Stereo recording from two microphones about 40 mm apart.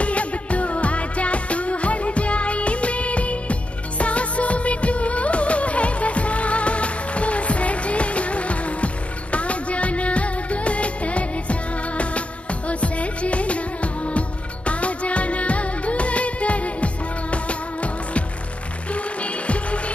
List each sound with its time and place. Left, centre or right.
0.0 s music: left
4.0 s music of bollywood: left
18.9 s music: left